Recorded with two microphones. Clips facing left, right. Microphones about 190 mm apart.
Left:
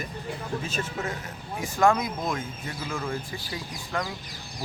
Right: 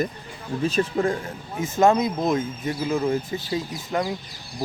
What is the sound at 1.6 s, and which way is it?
Speech, 20° right (ahead or behind).